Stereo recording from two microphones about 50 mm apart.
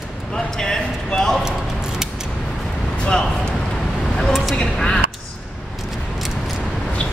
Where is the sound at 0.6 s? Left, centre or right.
Centre.